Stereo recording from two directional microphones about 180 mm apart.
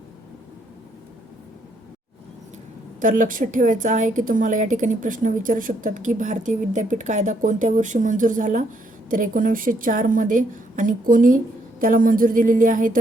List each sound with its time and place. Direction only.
3.0 s speech: 45° right (ahead or behind)